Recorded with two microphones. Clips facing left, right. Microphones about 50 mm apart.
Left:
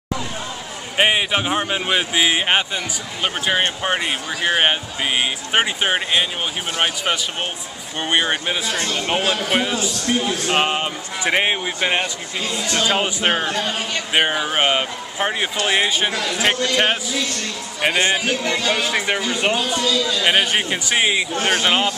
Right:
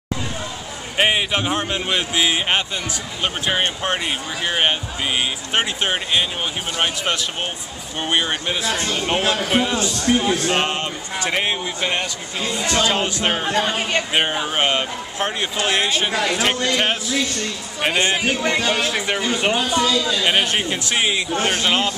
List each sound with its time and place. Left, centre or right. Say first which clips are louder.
0.9 s speech: left 1 dB; centre
8.0 s a man's voice: left 2 dB; centre
10.0 s a man's voice: right 4 dB; right
10.4 s speech: left 1 dB; centre
13.5 s speech: right 3 dB; right
14.1 s speech: left 6 dB; centre
18.3 s a man's voice: right 1 dB; right
18.7 s a man's voice: left 1 dB; centre
19.8 s a man's voice: right 1 dB; right
20.2 s speech: left 4 dB; centre